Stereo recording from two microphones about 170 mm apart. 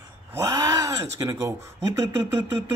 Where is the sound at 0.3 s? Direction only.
20° right (ahead or behind).